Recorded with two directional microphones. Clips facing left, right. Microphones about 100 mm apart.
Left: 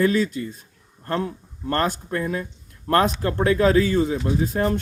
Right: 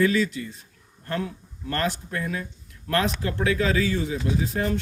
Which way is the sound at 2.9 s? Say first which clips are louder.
Left 5 dB; 45° left (ahead or behind).